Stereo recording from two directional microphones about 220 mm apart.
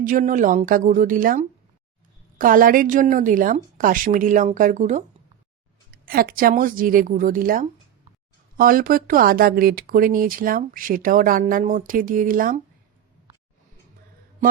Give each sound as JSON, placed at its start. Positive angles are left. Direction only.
{"t": 0.0, "sound": "speech", "side_deg": -35}